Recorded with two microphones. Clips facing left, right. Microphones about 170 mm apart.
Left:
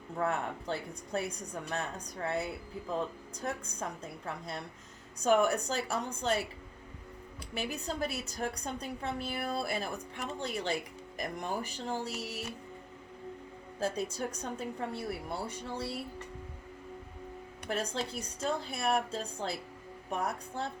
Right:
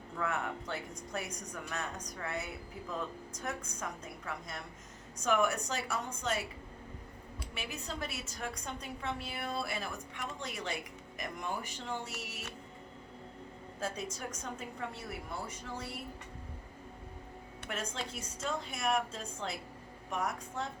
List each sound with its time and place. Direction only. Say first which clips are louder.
0.2 s a woman's voice: left 3 dB; 35° left (ahead or behind)
7.5 s a woman's voice: left 6 dB; 35° left (ahead or behind)
13.7 s a woman's voice: left 6 dB; 35° left (ahead or behind)
17.7 s a woman's voice: left 5 dB; 35° left (ahead or behind)